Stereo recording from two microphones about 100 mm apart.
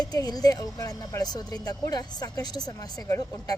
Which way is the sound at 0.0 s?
40° left (ahead or behind).